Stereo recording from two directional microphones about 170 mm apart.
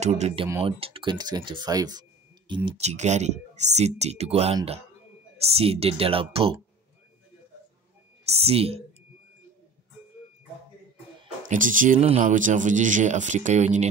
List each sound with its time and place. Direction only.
0.0 s speech: 40° right (ahead or behind)
2.8 s speech: 40° right (ahead or behind)
8.3 s speech: 35° right (ahead or behind)
11.4 s speech: 50° right (ahead or behind)